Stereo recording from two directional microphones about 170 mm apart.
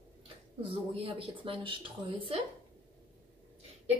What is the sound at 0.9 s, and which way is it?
Speech, 30° right (ahead or behind).